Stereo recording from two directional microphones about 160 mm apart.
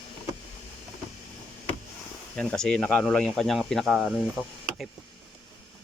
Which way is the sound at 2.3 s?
5° left (ahead or behind).